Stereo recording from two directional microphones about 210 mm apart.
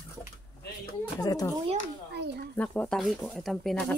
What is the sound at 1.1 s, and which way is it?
Speech, 15° left (ahead or behind).